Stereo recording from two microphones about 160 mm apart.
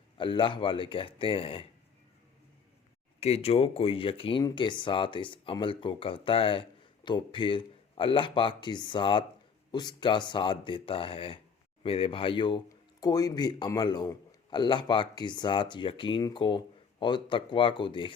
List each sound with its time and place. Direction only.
0.2 s speech: 30° left (ahead or behind)
3.2 s speech: 40° left (ahead or behind)